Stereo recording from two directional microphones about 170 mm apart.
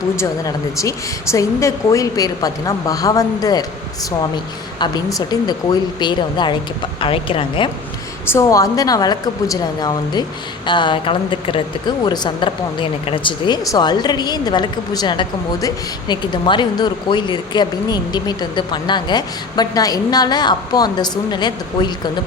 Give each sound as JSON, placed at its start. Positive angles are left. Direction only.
{"t": 0.2, "sound": "a woman's voice", "side_deg": 20}
{"t": 4.8, "sound": "a woman's voice", "side_deg": 20}
{"t": 8.3, "sound": "a woman's voice", "side_deg": 20}